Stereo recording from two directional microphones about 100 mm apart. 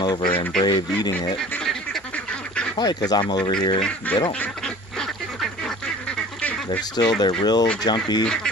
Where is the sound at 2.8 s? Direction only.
40° left (ahead or behind).